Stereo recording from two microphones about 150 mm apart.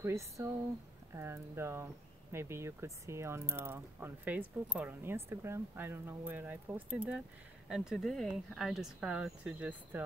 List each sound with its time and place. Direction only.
0.0 s speech: 20° right (ahead or behind)